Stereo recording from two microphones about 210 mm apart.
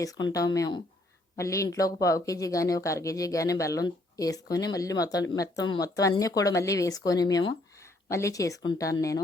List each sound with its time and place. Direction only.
0.0 s speech: 15° left (ahead or behind)